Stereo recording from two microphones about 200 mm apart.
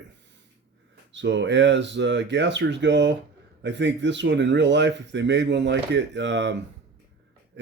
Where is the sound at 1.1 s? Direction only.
60° right (ahead or behind).